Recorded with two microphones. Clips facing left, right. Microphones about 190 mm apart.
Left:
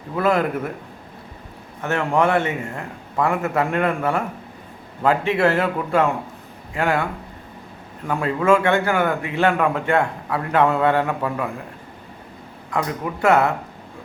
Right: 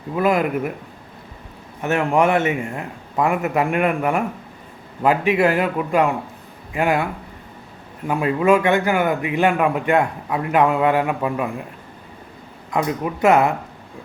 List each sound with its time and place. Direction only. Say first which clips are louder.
0.2 s a man's voice: right 1 dB; 15° right (ahead or behind)
1.8 s a man's voice: right 2 dB; 20° right (ahead or behind)
8.0 s a man's voice: right 2 dB; 15° right (ahead or behind)
12.7 s speech: right 3 dB; 20° right (ahead or behind)